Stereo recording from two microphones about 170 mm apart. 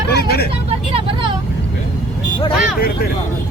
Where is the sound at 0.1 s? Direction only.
70° left (ahead or behind).